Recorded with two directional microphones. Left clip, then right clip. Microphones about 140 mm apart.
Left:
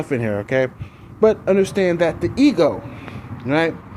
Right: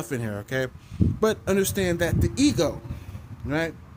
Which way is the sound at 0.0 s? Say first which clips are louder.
Left 10 dB; 25° right (ahead or behind).